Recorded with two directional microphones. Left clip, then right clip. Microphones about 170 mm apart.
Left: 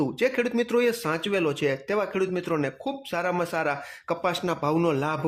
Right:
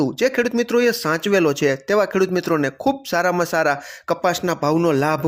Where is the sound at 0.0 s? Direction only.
25° right (ahead or behind).